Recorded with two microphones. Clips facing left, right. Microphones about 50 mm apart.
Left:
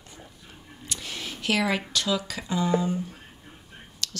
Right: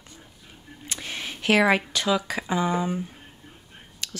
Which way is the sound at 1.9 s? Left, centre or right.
Right.